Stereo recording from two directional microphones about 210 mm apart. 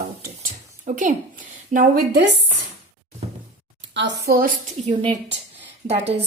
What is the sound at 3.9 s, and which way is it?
Speech, 55° right (ahead or behind).